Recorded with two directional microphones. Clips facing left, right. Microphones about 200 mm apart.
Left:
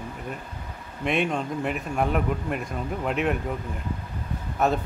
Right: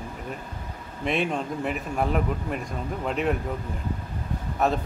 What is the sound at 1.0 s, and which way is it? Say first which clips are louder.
A man's voice: left 1 dB; centre (ahead or behind).